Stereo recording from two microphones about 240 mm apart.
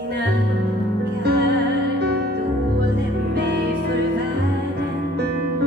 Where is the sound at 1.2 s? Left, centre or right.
Right.